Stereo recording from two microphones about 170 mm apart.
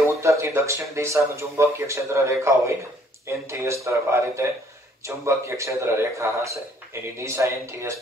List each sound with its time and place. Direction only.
0.0 s a man's voice: 15° right (ahead or behind)